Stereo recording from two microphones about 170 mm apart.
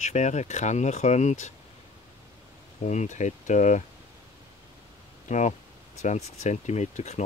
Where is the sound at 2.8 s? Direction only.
45° left (ahead or behind).